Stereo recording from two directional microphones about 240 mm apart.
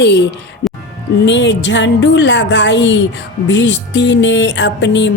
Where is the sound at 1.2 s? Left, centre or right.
Left.